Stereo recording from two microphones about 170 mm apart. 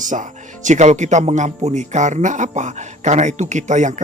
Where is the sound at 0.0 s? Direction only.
50° right (ahead or behind).